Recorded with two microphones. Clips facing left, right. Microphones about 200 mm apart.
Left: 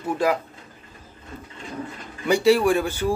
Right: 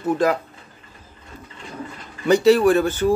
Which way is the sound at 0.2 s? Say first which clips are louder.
Right 1 dB; 10° left (ahead or behind).